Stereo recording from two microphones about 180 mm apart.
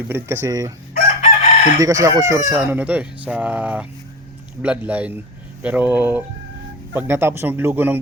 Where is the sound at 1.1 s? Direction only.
40° left (ahead or behind).